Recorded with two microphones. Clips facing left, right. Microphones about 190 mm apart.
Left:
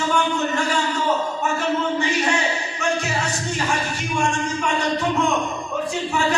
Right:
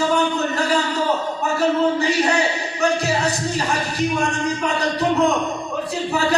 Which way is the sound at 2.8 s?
35° right (ahead or behind).